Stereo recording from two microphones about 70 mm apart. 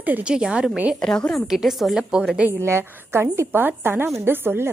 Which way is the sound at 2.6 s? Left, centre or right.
Right.